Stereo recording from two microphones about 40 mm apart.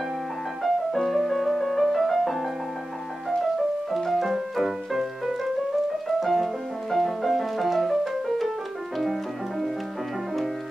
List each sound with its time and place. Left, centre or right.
0.9 s music: centre
3.9 s music: centre